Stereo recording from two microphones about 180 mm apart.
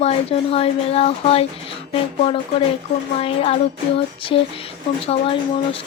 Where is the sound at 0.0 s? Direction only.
35° left (ahead or behind).